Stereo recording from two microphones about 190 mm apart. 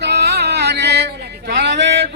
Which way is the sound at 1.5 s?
65° right (ahead or behind).